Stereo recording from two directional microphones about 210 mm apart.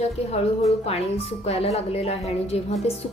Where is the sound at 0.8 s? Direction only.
30° left (ahead or behind).